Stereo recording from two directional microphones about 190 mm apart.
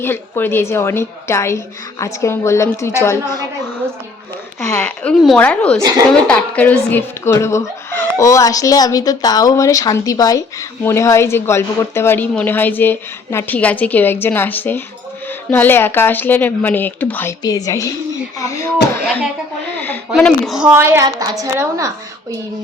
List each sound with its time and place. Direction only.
0.0 s speech: 10° left (ahead or behind)
4.8 s speech: 5° left (ahead or behind)
19.8 s a woman's voice: 5° left (ahead or behind); by 21.8 s 15° right (ahead or behind)